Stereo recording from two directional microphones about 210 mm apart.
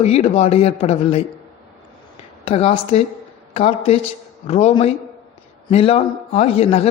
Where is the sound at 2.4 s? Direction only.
30° left (ahead or behind).